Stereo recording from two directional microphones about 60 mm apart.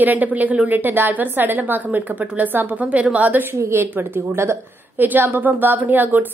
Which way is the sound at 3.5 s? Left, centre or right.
Right.